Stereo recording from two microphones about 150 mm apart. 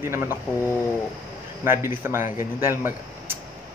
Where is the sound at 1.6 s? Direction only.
15° right (ahead or behind).